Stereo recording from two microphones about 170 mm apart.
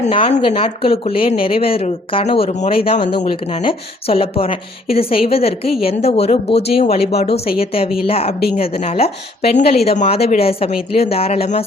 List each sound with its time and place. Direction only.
0.0 s speech: 35° left (ahead or behind)